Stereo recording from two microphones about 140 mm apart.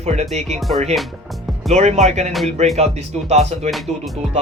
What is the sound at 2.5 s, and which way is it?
Speech, 50° right (ahead or behind).